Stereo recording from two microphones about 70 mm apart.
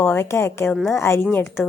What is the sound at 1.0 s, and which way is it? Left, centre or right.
Speech, left.